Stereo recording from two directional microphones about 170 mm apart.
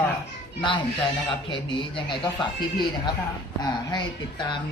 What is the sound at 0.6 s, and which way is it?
Speech, 30° left (ahead or behind).